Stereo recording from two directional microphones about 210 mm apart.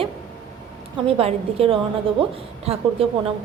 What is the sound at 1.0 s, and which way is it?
A woman's voice, 25° right (ahead or behind).